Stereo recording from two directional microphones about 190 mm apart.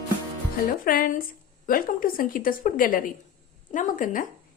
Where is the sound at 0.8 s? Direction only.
50° left (ahead or behind).